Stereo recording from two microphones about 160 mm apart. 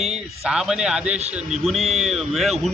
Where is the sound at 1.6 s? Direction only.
Centre (ahead or behind).